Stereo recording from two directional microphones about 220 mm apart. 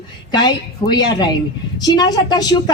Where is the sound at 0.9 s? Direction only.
20° left (ahead or behind).